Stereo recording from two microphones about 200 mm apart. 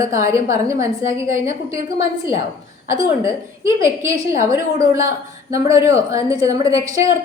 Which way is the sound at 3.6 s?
15° right (ahead or behind).